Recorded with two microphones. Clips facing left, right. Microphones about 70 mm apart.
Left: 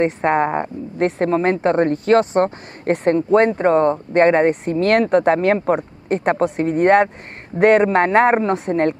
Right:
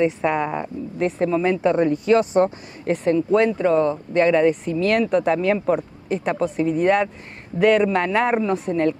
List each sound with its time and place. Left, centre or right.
0.0 s a woman's voice: left